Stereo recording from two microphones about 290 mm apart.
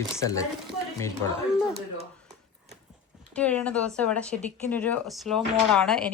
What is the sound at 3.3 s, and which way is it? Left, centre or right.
Speech, centre.